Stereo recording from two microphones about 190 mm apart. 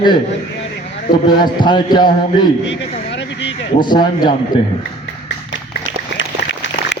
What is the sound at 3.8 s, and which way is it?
Speech, 25° left (ahead or behind).